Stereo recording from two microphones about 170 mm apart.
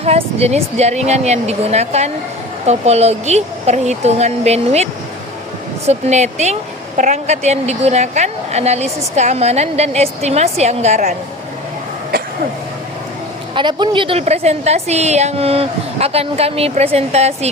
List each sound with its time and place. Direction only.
0.0 s a woman's voice: 35° right (ahead or behind)
13.5 s a woman's voice: 25° right (ahead or behind)